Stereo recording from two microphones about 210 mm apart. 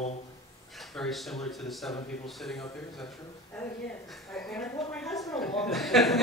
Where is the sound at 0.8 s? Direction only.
Centre (ahead or behind).